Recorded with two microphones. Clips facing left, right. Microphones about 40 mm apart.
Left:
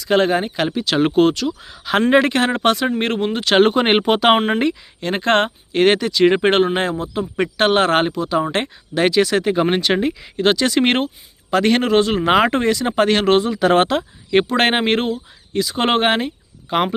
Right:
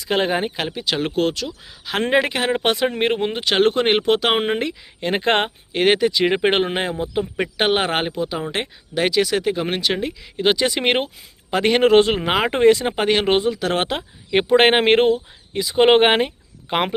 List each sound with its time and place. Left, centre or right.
0.1 s speech: centre
0.9 s speech: centre
3.5 s speech: centre
4.9 s speech: centre
5.7 s speech: centre
10.4 s speech: centre
11.8 s speech: right
12.2 s speech: centre
12.5 s speech: centre
13.5 s speech: centre
13.8 s speech: centre; by 15.2 s right
15.5 s speech: centre
16.0 s speech: right